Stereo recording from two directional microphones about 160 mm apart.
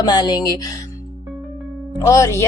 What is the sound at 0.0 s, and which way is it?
Speech, 25° left (ahead or behind).